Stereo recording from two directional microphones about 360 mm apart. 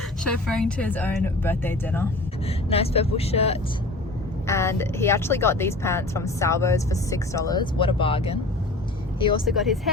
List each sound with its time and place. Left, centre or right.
0.4 s speech: centre
2.6 s speech: centre
9.4 s speech: centre